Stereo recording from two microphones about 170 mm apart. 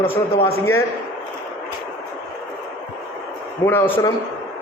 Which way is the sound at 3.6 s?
10° left (ahead or behind).